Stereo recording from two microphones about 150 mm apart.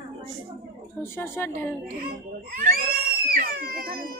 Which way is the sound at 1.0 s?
15° left (ahead or behind).